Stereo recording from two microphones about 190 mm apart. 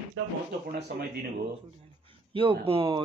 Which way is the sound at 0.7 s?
60° right (ahead or behind).